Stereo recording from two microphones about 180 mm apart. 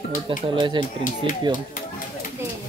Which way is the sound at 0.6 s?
25° right (ahead or behind).